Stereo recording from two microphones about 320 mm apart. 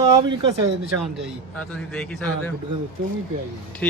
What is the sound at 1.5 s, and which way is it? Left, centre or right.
Speech, centre.